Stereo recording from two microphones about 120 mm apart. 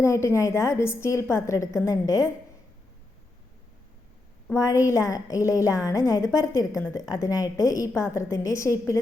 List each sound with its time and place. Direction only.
0.0 s a woman's voice: 25° left (ahead or behind)
4.5 s a woman's voice: 25° left (ahead or behind)